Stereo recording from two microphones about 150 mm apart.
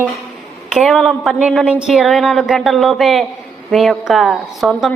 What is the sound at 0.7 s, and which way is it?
A woman's voice, centre (ahead or behind).